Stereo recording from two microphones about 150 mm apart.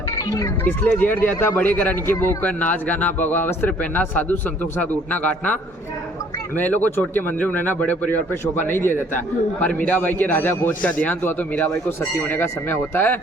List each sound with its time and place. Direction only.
0.3 s speech: 20° left (ahead or behind)
0.9 s a man's voice: 10° left (ahead or behind)
6.6 s a man's voice: 10° left (ahead or behind)